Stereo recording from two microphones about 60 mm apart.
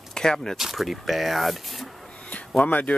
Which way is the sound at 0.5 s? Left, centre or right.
Centre.